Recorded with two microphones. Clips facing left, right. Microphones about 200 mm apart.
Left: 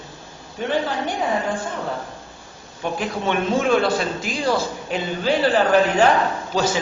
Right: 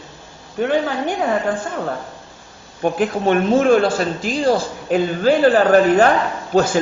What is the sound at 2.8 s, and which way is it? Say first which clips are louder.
A man's voice: right 7 dB; 45° right (ahead or behind).